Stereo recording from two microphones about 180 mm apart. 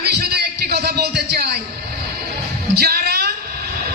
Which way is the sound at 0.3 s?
65° right (ahead or behind).